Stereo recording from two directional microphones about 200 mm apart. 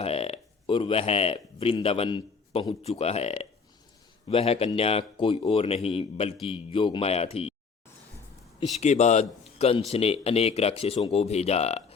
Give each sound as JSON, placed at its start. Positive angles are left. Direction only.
{"t": 0.0, "sound": "speech", "side_deg": 30}
{"t": 8.8, "sound": "speech", "side_deg": 35}